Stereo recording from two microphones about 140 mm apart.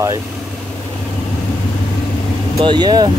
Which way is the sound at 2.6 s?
35° right (ahead or behind).